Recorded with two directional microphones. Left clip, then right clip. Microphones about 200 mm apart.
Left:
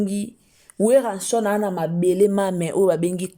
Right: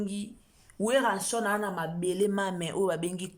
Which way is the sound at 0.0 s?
30° left (ahead or behind).